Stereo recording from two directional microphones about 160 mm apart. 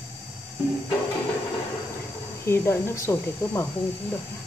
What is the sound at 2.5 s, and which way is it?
Speech, 15° left (ahead or behind).